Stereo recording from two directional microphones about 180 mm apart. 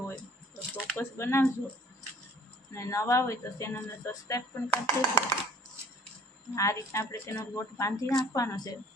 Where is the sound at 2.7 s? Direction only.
15° left (ahead or behind).